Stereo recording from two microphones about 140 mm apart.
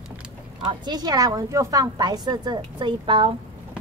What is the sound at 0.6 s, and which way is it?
A woman's voice, 30° right (ahead or behind).